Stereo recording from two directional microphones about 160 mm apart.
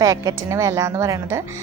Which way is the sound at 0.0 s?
20° right (ahead or behind).